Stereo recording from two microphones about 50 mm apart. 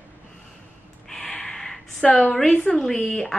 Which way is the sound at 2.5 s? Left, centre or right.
Left.